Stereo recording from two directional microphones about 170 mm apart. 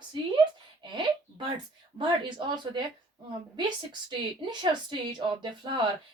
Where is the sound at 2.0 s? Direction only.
25° right (ahead or behind).